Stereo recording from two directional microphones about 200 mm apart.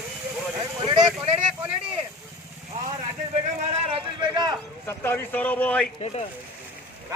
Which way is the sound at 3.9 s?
20° right (ahead or behind).